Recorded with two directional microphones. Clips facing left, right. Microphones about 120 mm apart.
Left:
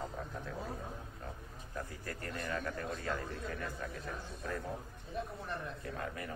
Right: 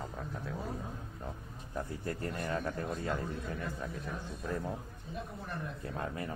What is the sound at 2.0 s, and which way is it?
A man's voice, 25° right (ahead or behind).